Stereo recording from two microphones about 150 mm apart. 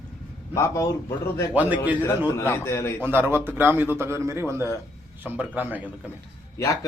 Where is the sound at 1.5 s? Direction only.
10° right (ahead or behind).